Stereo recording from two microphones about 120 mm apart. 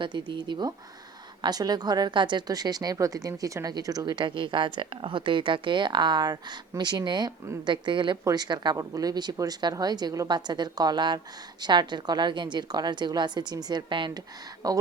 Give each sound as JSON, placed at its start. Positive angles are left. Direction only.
{"t": 0.0, "sound": "a woman's voice", "side_deg": -40}